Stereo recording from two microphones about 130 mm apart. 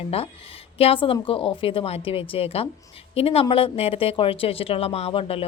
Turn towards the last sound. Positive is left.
turn(degrees=45)  # may be behind; listen again after turning